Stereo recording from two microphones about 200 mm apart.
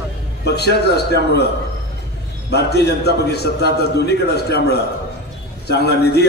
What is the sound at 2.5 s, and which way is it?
A man's voice, 55° left (ahead or behind).